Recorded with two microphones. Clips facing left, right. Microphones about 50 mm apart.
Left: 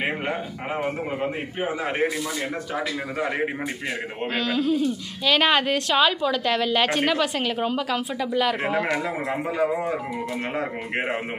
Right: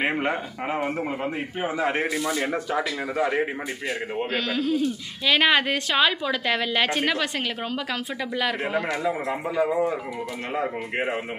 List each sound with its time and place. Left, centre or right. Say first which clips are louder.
0.0 s a sound: right 2 dB; centre
1.6 s speech: even; centre
2.2 s speech: right 3 dB; right
3.2 s a man's voice: right 2 dB; centre